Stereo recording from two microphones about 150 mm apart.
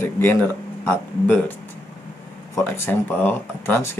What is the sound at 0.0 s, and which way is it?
Speech, 15° left (ahead or behind).